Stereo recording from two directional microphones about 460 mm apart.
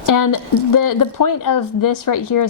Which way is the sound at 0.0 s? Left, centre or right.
Left.